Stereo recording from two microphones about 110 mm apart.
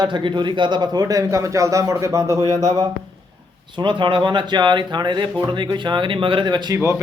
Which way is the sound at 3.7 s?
45° right (ahead or behind).